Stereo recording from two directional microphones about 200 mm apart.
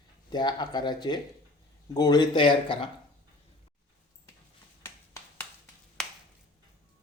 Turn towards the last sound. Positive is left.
turn(degrees=5)  # may be behind; listen again after turning